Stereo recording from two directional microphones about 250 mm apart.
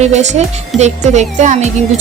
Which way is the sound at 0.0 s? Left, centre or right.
Right.